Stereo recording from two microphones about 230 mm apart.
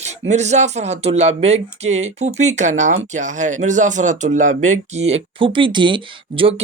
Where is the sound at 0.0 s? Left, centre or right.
Right.